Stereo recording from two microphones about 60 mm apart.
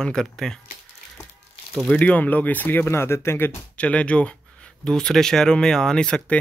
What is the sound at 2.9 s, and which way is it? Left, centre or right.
Speech, left.